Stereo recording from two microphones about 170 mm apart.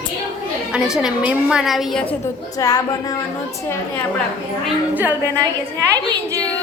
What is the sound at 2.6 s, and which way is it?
Speech, 20° left (ahead or behind).